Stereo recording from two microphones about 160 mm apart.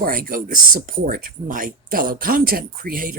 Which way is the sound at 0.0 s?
60° right (ahead or behind).